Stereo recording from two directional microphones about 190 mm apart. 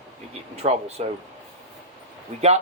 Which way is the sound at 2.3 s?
35° right (ahead or behind).